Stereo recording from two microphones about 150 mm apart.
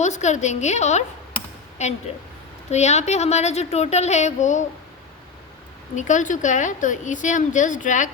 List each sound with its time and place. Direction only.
0.0 s a woman's voice: 50° left (ahead or behind)
6.0 s a woman's voice: 55° left (ahead or behind)